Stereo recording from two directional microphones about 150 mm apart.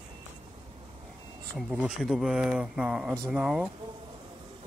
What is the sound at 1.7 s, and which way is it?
Speech, 5° right (ahead or behind).